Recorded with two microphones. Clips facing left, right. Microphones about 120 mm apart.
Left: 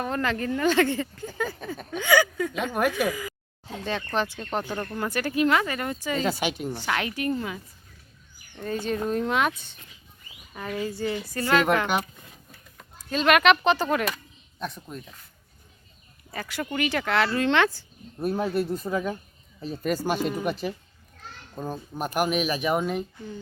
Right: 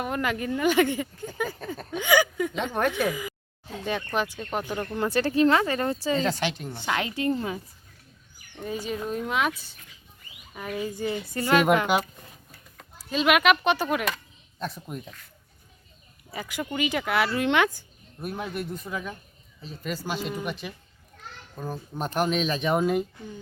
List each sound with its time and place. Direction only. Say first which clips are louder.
0.0 s speech: left 1 dB; 10° right (ahead or behind)
1.6 s speech: even; 5° left (ahead or behind)
1.9 s speech: even; 15° right (ahead or behind)
4.9 s speech: right 4 dB; 30° right (ahead or behind)
6.2 s speech: left 1 dB; 10° left (ahead or behind)
6.7 s speech: even; 20° right (ahead or behind)
8.5 s speech: left 3 dB; 10° right (ahead or behind)
13.1 s speech: left 1 dB; 5° right (ahead or behind)
16.3 s speech: left 1 dB; 15° right (ahead or behind)
18.2 s speech: left 7 dB; 35° left (ahead or behind)
21.5 s speech: left 1 dB; 20° left (ahead or behind); by 23.0 s 5° right (ahead or behind)